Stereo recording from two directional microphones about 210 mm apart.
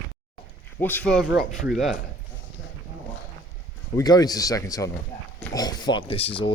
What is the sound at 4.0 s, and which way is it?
Speech, 20° left (ahead or behind).